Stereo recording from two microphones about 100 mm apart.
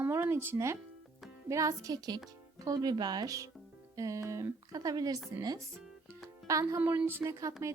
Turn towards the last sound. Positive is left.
turn(degrees=-30)  # may be behind; listen again after turning